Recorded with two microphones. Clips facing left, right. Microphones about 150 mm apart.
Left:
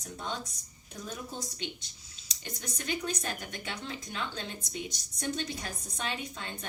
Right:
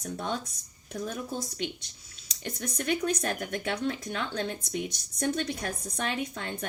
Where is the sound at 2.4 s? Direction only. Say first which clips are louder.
Right 6 dB; 60° right (ahead or behind).